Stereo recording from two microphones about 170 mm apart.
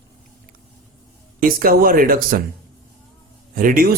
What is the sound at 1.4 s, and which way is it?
Speech, 60° right (ahead or behind).